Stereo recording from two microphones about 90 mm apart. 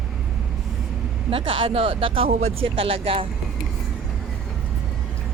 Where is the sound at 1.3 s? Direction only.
90° right.